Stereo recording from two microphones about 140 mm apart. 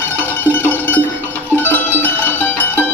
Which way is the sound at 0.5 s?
15° left (ahead or behind).